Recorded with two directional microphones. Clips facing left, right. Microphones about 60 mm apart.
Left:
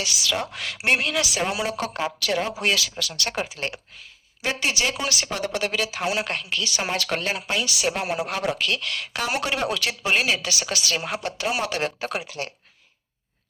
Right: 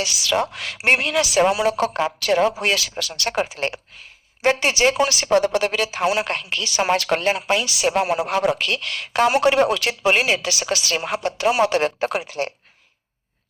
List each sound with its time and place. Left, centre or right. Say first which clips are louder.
0.0 s a woman's voice: right 5 dB; right